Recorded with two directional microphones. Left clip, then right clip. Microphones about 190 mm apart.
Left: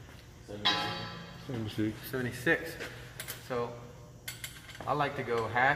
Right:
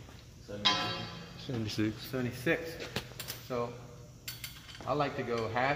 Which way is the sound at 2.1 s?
30° right (ahead or behind).